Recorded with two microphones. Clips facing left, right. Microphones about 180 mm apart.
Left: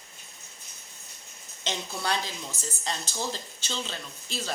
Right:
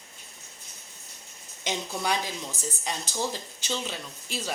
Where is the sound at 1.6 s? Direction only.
15° right (ahead or behind).